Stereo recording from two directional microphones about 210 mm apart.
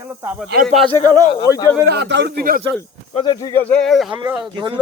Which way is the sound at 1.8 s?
50° right (ahead or behind).